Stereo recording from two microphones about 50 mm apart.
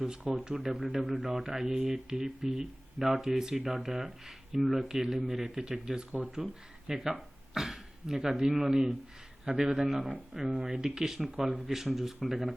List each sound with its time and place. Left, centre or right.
0.0 s speech: centre